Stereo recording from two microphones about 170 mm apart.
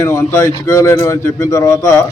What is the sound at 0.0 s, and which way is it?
Speech, 15° left (ahead or behind).